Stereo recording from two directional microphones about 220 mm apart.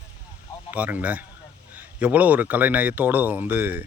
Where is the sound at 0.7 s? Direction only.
5° right (ahead or behind).